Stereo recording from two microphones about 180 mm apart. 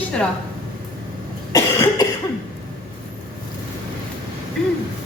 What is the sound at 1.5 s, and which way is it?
Cough, 20° left (ahead or behind).